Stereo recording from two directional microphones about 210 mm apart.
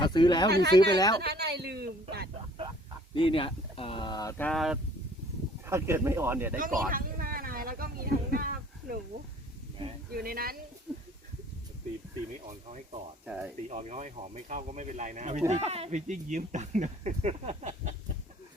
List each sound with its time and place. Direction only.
0.0 s speech: 20° left (ahead or behind)
0.5 s speech: 50° right (ahead or behind)
0.9 s speech: 20° left (ahead or behind)
1.2 s a sound: 50° right (ahead or behind)
3.2 s speech: 25° left (ahead or behind); by 4.8 s centre (ahead or behind)
5.6 s speech: 10° right (ahead or behind)
6.6 s a sound: 40° right (ahead or behind)
10.2 s speech: 45° right (ahead or behind)
10.9 s a sound: 5° right (ahead or behind)
13.2 s speech: 5° right (ahead or behind)
13.7 s speech: 35° right (ahead or behind)